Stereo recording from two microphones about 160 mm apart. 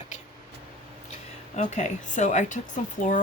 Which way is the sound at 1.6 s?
50° left (ahead or behind).